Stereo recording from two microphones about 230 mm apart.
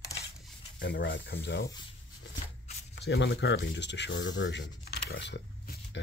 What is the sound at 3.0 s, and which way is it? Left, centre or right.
Speech, left.